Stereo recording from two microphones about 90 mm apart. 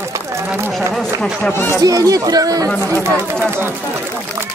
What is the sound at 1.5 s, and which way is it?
Speech, 30° left (ahead or behind).